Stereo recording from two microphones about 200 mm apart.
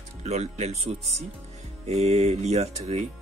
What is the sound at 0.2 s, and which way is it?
Speech, 35° right (ahead or behind).